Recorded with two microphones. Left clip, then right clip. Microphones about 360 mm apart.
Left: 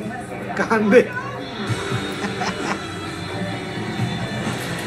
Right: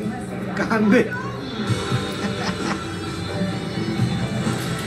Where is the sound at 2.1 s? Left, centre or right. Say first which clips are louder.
Left 1 dB; centre.